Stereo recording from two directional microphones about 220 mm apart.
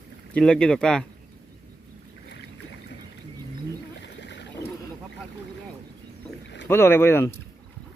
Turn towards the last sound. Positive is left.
turn(degrees=10)  # may be behind; listen again after turning